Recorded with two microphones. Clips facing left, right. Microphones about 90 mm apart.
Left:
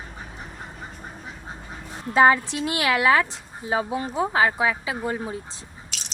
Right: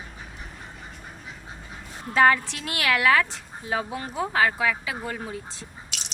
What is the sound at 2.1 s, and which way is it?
Speech, 20° left (ahead or behind).